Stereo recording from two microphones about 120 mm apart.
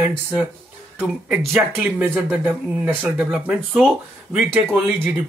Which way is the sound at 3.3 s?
Centre (ahead or behind).